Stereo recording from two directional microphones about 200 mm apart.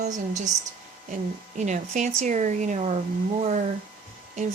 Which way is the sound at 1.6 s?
35° right (ahead or behind).